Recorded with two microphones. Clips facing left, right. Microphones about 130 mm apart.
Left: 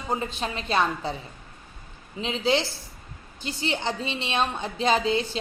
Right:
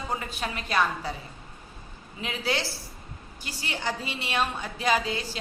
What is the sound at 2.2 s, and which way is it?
A woman's voice, 25° left (ahead or behind).